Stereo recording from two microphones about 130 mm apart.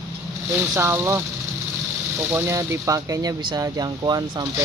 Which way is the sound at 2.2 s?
20° right (ahead or behind).